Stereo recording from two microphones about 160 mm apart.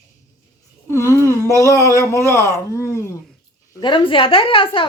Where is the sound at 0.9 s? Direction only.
20° left (ahead or behind).